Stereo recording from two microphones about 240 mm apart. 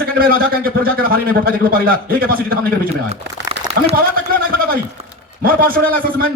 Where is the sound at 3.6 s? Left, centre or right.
Right.